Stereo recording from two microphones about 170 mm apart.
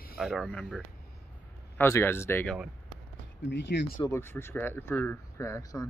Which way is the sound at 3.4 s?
90° left.